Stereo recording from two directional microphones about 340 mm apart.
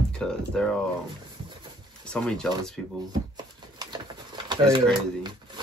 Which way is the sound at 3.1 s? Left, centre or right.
Centre.